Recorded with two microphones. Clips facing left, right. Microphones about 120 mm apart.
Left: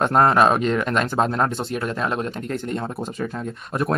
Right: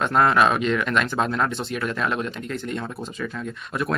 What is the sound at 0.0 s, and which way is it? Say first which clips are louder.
Speech: left 2 dB; 40° left (ahead or behind).